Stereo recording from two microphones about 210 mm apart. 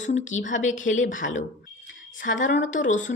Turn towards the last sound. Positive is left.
turn(degrees=35)  # may be behind; listen again after turning